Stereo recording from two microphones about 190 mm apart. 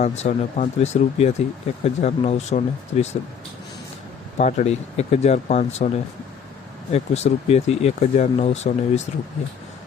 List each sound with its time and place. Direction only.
0.0 s speech: 40° left (ahead or behind)
4.4 s speech: 35° left (ahead or behind)
6.9 s speech: 35° left (ahead or behind)